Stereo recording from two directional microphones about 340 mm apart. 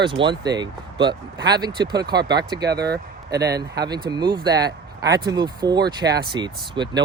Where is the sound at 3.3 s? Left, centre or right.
Centre.